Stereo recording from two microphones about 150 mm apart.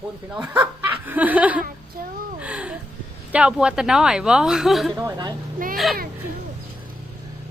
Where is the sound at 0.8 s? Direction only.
10° right (ahead or behind).